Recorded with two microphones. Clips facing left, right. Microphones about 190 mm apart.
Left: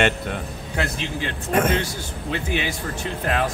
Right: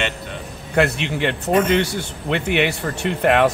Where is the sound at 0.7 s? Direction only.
65° right (ahead or behind).